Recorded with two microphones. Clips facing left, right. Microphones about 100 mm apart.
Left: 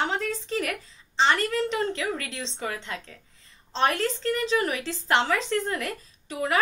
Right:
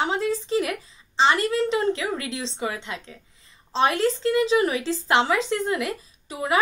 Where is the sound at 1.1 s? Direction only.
15° right (ahead or behind).